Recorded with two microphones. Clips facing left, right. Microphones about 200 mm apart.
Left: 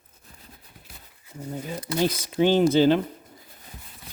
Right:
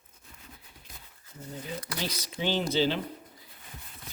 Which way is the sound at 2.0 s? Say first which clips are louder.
Left 13 dB; 50° left (ahead or behind).